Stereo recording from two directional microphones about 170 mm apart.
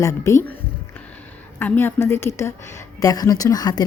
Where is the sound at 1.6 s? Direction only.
10° left (ahead or behind).